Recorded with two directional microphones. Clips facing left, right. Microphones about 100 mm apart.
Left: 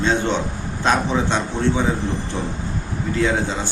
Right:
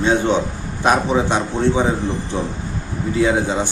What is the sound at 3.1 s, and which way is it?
Speech, 15° right (ahead or behind).